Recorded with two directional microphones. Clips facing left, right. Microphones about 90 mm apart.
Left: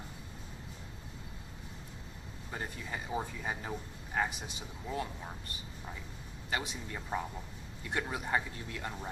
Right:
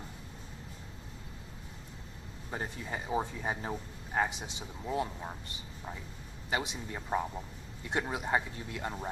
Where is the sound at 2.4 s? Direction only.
20° right (ahead or behind).